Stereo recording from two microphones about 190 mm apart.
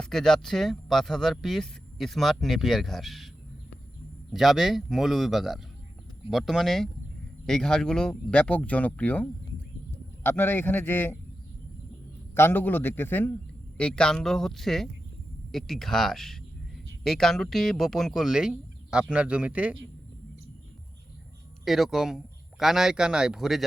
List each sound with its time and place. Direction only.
0.0 s speech: centre (ahead or behind)
4.3 s speech: centre (ahead or behind)
12.3 s speech: 10° left (ahead or behind); by 19.7 s 5° right (ahead or behind)
21.6 s speech: centre (ahead or behind)